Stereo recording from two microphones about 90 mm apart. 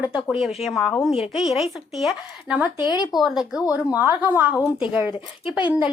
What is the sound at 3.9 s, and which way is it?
Speech, 20° right (ahead or behind).